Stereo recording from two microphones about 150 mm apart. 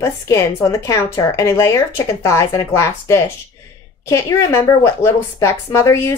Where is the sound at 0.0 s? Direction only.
20° left (ahead or behind).